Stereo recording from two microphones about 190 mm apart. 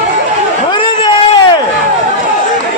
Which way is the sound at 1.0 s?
25° left (ahead or behind).